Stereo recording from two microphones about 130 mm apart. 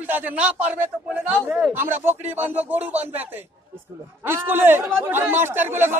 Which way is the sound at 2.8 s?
55° right (ahead or behind).